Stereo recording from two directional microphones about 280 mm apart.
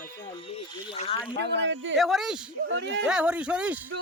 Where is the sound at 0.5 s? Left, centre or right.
Left.